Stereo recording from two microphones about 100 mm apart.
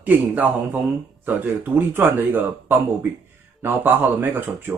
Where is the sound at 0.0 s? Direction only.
15° right (ahead or behind).